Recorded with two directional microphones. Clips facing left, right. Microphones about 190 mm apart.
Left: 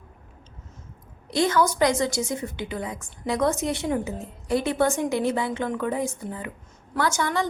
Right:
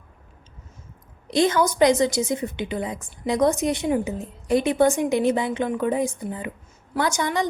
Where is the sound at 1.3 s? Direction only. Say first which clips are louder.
Right 2 dB; 20° right (ahead or behind).